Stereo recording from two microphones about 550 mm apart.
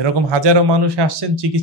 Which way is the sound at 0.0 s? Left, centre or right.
Right.